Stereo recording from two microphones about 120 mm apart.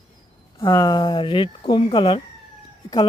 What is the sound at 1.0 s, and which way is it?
Speech, 45° left (ahead or behind).